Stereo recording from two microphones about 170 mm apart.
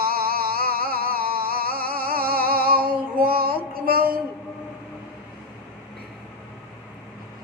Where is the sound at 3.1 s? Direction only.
60° right (ahead or behind).